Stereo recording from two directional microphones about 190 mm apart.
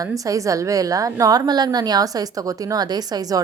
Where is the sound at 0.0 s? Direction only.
20° right (ahead or behind).